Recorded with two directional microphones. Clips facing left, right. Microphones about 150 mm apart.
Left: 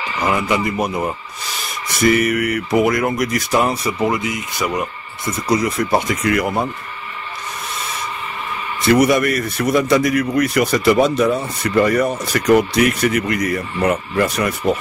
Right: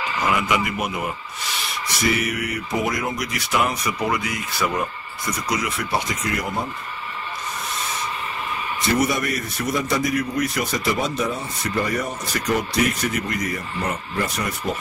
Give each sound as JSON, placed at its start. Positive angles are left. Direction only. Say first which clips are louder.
{"t": 0.3, "sound": "speech", "louder": "left 4 dB", "side_deg": 35}
{"t": 2.0, "sound": "speech", "louder": "left 8 dB", "side_deg": 55}
{"t": 5.5, "sound": "speech", "louder": "left 9 dB", "side_deg": 35}
{"t": 8.9, "sound": "a man's voice", "louder": "left 8 dB", "side_deg": 70}